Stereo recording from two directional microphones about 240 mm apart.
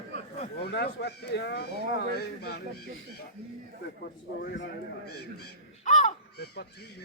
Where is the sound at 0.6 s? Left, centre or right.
Left.